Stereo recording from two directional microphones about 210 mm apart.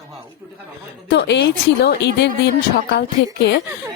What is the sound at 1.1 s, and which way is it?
Speech, 55° left (ahead or behind).